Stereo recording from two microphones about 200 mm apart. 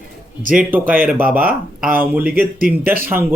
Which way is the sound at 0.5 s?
10° right (ahead or behind).